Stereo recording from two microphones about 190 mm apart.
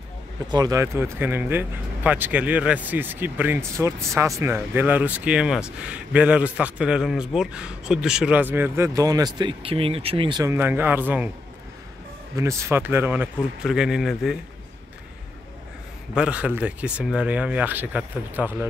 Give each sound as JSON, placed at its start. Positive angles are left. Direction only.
{"t": 0.5, "sound": "speech", "side_deg": -20}
{"t": 10.5, "sound": "speech", "side_deg": -10}
{"t": 12.4, "sound": "speech", "side_deg": -15}
{"t": 16.2, "sound": "speech", "side_deg": -5}